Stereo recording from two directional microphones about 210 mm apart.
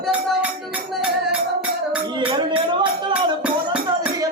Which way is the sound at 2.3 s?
25° right (ahead or behind).